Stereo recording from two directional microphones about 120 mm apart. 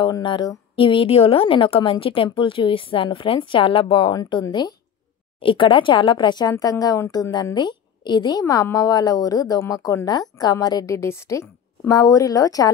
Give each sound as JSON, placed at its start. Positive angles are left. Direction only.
{"t": 0.0, "sound": "a woman's voice", "side_deg": 40}